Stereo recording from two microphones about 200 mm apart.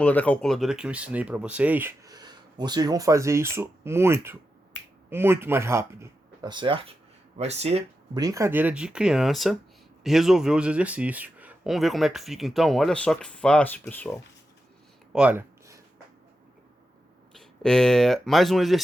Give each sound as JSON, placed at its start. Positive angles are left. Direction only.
{"t": 0.0, "sound": "speech", "side_deg": 5}
{"t": 8.2, "sound": "speech", "side_deg": -15}
{"t": 15.1, "sound": "a sound", "side_deg": -5}
{"t": 17.3, "sound": "speech", "side_deg": 0}